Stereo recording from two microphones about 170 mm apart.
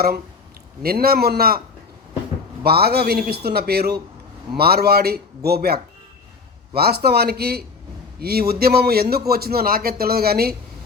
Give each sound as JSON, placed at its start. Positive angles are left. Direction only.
{"t": 0.8, "sound": "a man's voice", "side_deg": -65}
{"t": 2.6, "sound": "a man's voice", "side_deg": -70}